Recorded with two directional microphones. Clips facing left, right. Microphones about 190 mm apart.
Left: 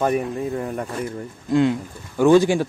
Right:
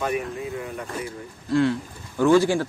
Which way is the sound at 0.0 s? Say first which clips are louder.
Left 5 dB; 45° left (ahead or behind).